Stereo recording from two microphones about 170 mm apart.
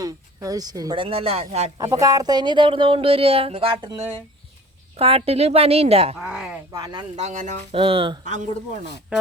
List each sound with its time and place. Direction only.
0.0 s speech: 20° right (ahead or behind); by 1.7 s 40° right (ahead or behind)
1.8 s a woman's voice: 20° right (ahead or behind); by 6.1 s 35° right (ahead or behind)
6.2 s speech: 5° right (ahead or behind)
6.7 s speech: 20° right (ahead or behind)
7.2 s speech: 45° right (ahead or behind)
7.8 s a woman's voice: 30° right (ahead or behind)
8.2 s speech: 45° right (ahead or behind)